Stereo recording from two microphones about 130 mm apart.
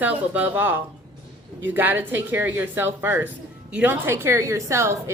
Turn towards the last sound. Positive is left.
turn(degrees=-20)  # may be behind; listen again after turning